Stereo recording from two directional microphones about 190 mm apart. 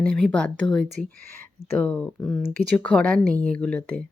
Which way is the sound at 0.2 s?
5° left (ahead or behind).